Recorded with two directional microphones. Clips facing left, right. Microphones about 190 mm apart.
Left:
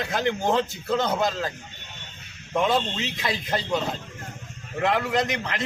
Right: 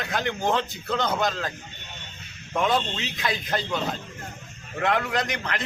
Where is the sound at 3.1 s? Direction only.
25° left (ahead or behind).